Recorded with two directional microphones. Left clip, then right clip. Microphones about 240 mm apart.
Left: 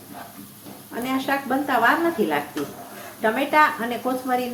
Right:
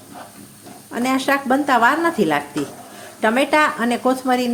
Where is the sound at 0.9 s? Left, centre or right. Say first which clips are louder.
Right 6 dB; right.